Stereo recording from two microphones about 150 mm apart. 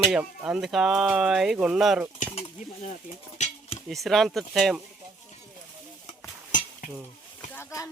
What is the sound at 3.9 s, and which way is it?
Speech, centre (ahead or behind).